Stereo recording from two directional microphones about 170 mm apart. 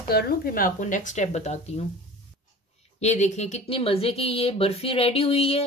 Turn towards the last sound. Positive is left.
turn(degrees=35)  # may be behind; listen again after turning